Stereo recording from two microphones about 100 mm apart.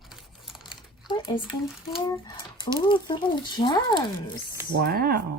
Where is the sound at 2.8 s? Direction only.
55° left (ahead or behind).